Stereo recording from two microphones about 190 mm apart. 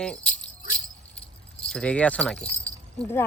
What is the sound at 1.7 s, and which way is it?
Speech, 5° left (ahead or behind).